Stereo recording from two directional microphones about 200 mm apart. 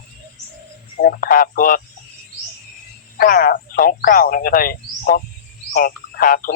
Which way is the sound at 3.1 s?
45° left (ahead or behind).